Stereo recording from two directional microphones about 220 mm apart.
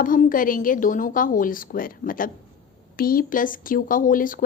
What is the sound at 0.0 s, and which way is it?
Speech, 40° left (ahead or behind).